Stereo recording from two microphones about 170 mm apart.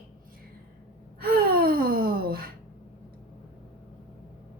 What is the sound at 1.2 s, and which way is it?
A woman's voice, 60° right (ahead or behind).